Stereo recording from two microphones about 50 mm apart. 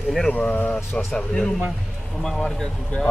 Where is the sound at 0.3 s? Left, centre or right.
Left.